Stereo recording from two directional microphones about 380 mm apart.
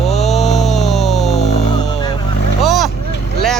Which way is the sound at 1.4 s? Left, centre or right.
Centre.